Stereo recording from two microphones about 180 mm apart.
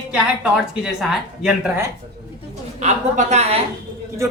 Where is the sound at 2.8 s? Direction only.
40° right (ahead or behind).